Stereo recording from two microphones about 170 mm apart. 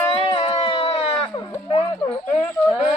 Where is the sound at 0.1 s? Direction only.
35° left (ahead or behind).